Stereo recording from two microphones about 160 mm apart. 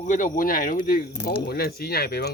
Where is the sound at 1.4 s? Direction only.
75° left (ahead or behind).